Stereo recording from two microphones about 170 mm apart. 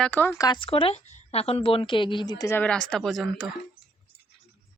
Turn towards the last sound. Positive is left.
turn(degrees=0)  # may be behind; listen again after turning